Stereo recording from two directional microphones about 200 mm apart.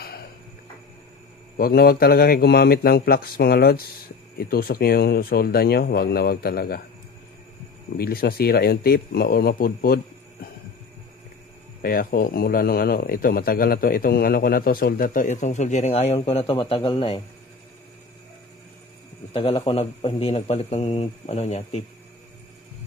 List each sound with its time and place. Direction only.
0.0 s a sound: 50° left (ahead or behind)
1.6 s a man's voice: 50° left (ahead or behind)
8.0 s a man's voice: 50° left (ahead or behind)
11.8 s a man's voice: 45° left (ahead or behind); by 17.2 s 25° left (ahead or behind)
19.3 s a man's voice: 25° left (ahead or behind)